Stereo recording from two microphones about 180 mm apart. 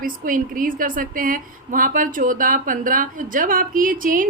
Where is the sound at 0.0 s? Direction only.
50° right (ahead or behind).